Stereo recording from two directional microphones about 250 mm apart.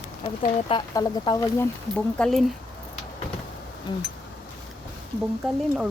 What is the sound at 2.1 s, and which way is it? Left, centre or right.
Speech, centre.